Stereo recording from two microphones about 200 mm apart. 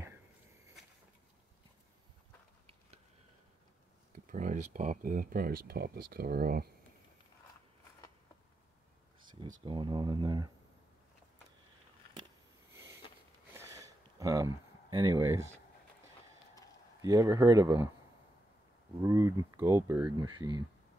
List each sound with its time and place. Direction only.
4.3 s speech: 40° right (ahead or behind)
9.7 s speech: 25° right (ahead or behind)
12.7 s a sound: 10° right (ahead or behind)
17.0 s speech: 15° right (ahead or behind)
19.0 s speech: 15° right (ahead or behind)